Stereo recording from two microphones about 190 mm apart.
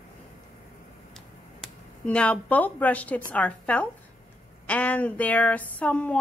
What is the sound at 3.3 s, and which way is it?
Speech, 5° left (ahead or behind).